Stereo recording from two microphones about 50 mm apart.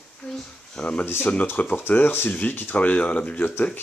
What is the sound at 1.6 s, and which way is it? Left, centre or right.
Speech, left.